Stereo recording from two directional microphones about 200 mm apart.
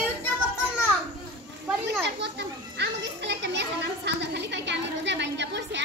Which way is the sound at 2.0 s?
55° right (ahead or behind).